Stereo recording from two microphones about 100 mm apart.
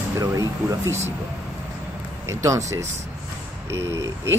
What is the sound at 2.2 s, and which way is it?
Speech, 30° right (ahead or behind).